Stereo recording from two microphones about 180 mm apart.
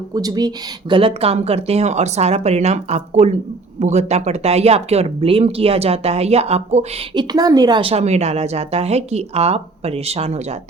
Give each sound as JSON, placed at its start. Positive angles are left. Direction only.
{"t": 0.1, "sound": "a woman's voice", "side_deg": -20}
{"t": 7.1, "sound": "a woman's voice", "side_deg": -20}